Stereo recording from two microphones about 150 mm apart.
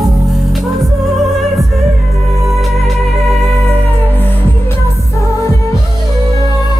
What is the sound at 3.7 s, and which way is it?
Music, 10° left (ahead or behind).